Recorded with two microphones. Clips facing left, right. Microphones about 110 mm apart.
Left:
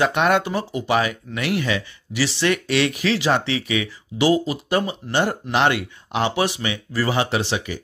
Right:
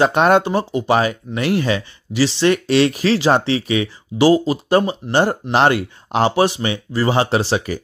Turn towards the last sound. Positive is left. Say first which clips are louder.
# right 5 dB
turn(degrees=-40)  # may be behind; listen again after turning